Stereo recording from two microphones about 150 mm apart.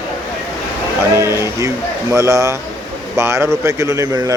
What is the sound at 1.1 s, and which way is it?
Speech, 20° right (ahead or behind).